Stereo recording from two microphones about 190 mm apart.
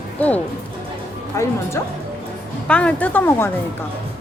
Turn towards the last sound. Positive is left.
turn(degrees=15)  # may be behind; listen again after turning